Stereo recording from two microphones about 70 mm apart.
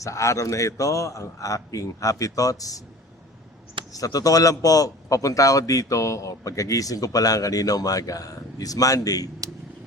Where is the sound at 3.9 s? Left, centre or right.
Left.